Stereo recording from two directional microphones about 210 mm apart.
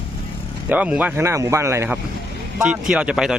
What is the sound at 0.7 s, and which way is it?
Speech, 5° right (ahead or behind).